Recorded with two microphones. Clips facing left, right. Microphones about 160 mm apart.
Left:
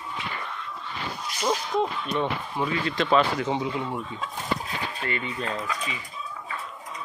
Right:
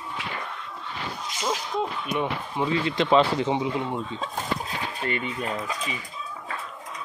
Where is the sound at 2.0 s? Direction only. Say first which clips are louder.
Even; 15° right (ahead or behind).